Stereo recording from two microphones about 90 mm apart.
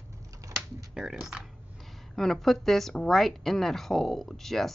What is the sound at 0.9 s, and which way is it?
Speech, 5° right (ahead or behind).